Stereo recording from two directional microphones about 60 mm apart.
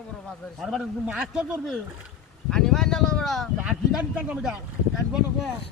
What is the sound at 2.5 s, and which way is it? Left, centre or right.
Speech, centre.